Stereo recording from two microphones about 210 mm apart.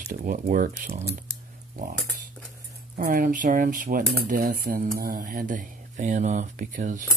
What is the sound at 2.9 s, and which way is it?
Speech, 40° right (ahead or behind).